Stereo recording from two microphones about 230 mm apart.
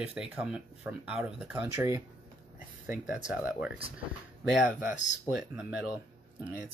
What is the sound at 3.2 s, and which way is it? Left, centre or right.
Speech, centre.